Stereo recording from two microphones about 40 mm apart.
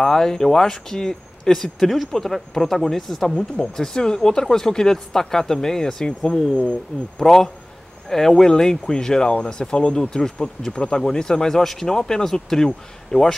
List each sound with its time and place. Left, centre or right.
0.0 s speech: centre
11.6 s speech: centre